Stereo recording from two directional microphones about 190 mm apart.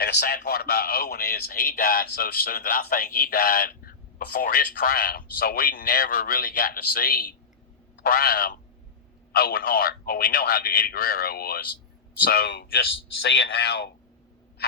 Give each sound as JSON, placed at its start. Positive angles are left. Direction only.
{"t": 0.0, "sound": "a man's voice", "side_deg": 55}
{"t": 13.2, "sound": "speech", "side_deg": 70}